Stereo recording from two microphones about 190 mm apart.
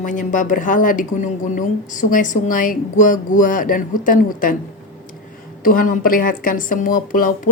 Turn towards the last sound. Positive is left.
turn(degrees=45)  # may be behind; listen again after turning